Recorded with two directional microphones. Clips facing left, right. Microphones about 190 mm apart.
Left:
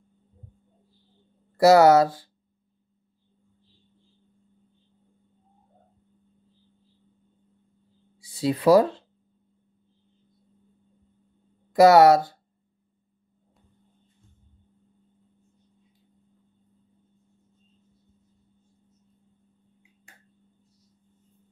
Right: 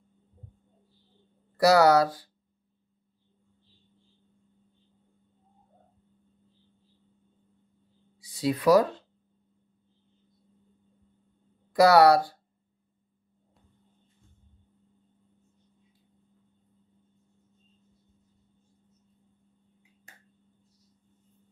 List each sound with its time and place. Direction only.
1.6 s speech: 25° left (ahead or behind)
8.2 s speech: 30° left (ahead or behind)
11.7 s speech: 25° left (ahead or behind)